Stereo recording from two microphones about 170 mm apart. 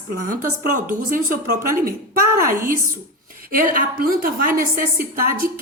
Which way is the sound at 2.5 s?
15° right (ahead or behind).